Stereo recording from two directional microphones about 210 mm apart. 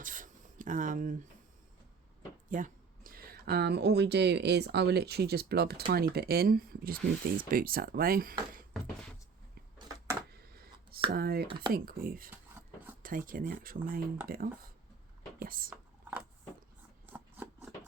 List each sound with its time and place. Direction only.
0.0 s writing: 40° right (ahead or behind)
2.5 s speech: 40° right (ahead or behind)
10.4 s a sound: 45° right (ahead or behind)
11.1 s speech: 45° right (ahead or behind)
11.4 s speech: 20° right (ahead or behind)
11.7 s speech: 45° right (ahead or behind)
12.3 s a sound: 10° right (ahead or behind)
13.0 s speech: 40° right (ahead or behind)
17.1 s a sound: 10° right (ahead or behind)